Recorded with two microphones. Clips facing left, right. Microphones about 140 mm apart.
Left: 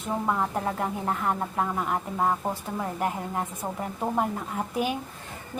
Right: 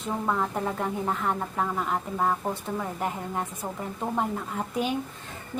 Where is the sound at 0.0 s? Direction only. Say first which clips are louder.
Left 1 dB; 10° left (ahead or behind).